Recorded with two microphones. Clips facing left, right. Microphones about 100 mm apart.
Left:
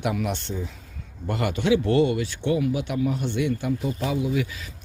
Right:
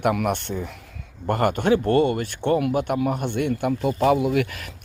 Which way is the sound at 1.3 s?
50° right (ahead or behind).